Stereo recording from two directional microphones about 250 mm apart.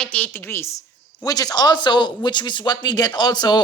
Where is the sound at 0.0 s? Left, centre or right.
Centre.